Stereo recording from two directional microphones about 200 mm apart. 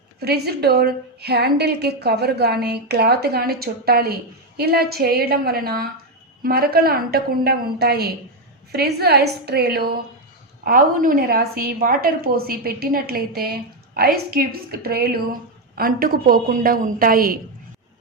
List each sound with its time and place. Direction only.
0.2 s a woman's voice: 50° right (ahead or behind)